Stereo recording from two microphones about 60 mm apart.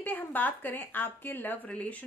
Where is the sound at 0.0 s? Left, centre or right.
Left.